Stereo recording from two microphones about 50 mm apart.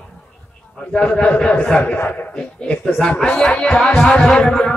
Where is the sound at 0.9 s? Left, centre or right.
Centre.